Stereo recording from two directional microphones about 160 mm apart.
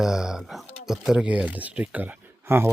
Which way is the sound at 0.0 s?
5° right (ahead or behind).